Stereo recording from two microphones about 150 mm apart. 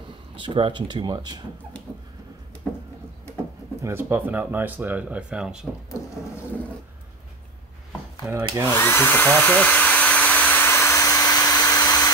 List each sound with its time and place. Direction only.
0.4 s speech: 35° right (ahead or behind)
3.8 s speech: 15° right (ahead or behind)
8.3 s a sound: 20° right (ahead or behind)
8.6 s hair dryer: 15° left (ahead or behind)